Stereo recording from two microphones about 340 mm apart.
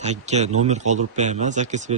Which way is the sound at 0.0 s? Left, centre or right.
Centre.